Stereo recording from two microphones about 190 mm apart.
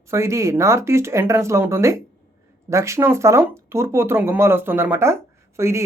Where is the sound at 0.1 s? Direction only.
15° right (ahead or behind).